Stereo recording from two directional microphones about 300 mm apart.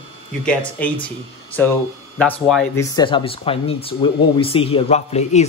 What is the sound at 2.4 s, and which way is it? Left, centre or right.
Speech, centre.